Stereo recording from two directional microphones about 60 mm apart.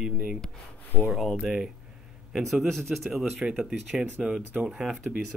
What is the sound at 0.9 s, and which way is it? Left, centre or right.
Speech, left.